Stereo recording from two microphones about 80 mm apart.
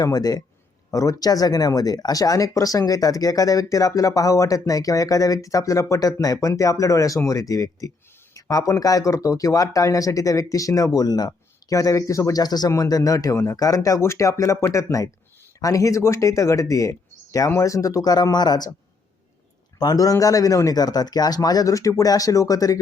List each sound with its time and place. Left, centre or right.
0.0 s speech: left
11.3 s speech: left
13.6 s speech: left
19.8 s speech: left